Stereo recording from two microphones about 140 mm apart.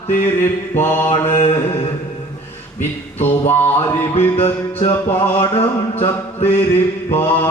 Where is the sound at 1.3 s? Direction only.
45° left (ahead or behind).